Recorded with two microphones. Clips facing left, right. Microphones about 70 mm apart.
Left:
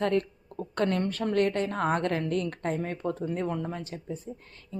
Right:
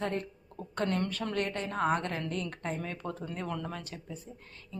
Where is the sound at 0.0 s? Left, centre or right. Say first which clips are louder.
Left 7 dB; left.